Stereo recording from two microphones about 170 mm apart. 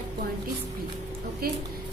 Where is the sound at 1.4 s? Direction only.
60° right (ahead or behind).